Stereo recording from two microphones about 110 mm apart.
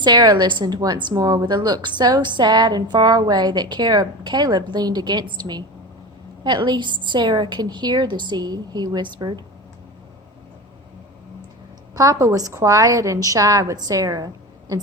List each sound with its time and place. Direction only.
0.0 s a woman's voice: 40° right (ahead or behind)
11.9 s a woman's voice: 30° right (ahead or behind)